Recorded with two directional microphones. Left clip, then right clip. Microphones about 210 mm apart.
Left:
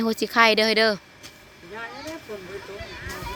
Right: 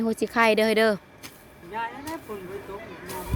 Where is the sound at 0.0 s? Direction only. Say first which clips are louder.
Left 3 dB; centre (ahead or behind).